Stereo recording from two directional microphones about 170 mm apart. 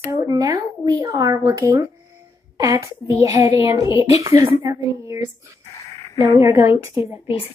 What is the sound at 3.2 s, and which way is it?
A woman's voice, 15° right (ahead or behind).